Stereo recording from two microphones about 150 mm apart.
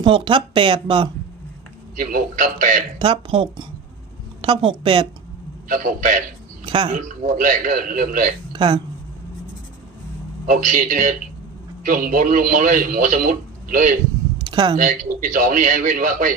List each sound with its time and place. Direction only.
0.0 s speech: 35° right (ahead or behind)
2.0 s speech: 70° right (ahead or behind)
3.0 s a woman's voice: 35° right (ahead or behind)
5.6 s speech: 65° right (ahead or behind)
6.7 s speech: 35° right (ahead or behind)
6.9 s speech: 65° right (ahead or behind)
8.5 s speech: 30° right (ahead or behind)
10.4 s speech: 60° right (ahead or behind)
14.4 s a sound: 30° right (ahead or behind)
14.8 s speech: 60° right (ahead or behind)